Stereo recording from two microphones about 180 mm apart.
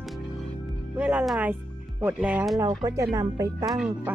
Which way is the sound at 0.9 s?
5° right (ahead or behind).